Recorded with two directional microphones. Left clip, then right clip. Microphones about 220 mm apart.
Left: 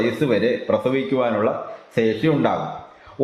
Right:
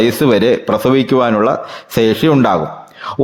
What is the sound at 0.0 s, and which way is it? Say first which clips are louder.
Speech: right 8 dB; 50° right (ahead or behind).